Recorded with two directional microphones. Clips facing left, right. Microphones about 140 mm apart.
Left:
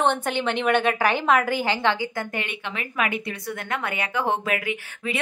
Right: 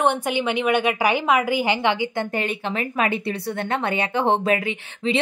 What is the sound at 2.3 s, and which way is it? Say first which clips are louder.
Speech: right 6 dB; 35° right (ahead or behind).